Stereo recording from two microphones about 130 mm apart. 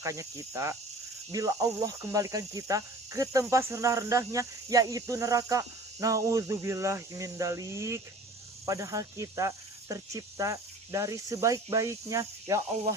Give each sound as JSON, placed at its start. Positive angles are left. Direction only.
{"t": 0.0, "sound": "speech", "side_deg": -25}